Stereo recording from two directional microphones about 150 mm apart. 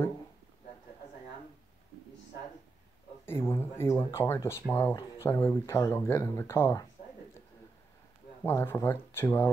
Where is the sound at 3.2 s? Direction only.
15° left (ahead or behind).